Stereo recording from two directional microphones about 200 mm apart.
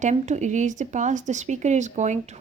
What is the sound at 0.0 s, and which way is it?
Speech, 35° right (ahead or behind).